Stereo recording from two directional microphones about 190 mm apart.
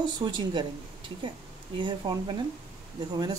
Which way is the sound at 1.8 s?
25° right (ahead or behind).